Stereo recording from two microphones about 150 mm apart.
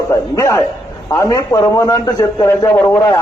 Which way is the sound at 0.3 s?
20° left (ahead or behind).